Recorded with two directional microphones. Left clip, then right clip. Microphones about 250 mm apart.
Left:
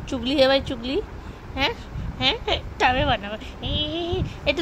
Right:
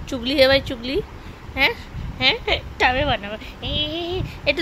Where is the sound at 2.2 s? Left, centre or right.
Right.